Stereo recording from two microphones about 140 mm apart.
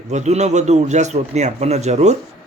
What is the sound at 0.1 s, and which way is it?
A man's voice, 55° right (ahead or behind).